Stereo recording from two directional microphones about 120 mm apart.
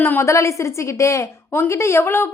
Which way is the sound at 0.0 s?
20° left (ahead or behind).